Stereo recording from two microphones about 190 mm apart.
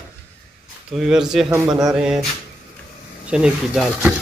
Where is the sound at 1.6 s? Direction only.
20° right (ahead or behind).